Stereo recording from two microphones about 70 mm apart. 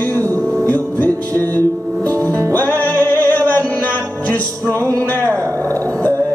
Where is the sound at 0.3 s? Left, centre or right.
Left.